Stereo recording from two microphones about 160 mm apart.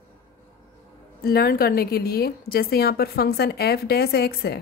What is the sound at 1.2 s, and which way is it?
A woman's voice, 70° left (ahead or behind).